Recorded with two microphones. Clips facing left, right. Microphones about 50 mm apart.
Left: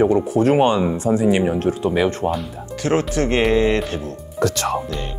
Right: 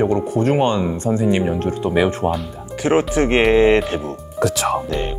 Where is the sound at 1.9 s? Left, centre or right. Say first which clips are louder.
Right 5 dB; centre.